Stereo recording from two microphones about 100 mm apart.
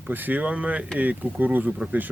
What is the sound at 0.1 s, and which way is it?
Speech, 20° right (ahead or behind).